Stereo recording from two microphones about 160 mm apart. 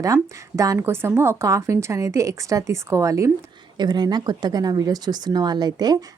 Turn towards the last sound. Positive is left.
turn(degrees=-25)  # may be behind; listen again after turning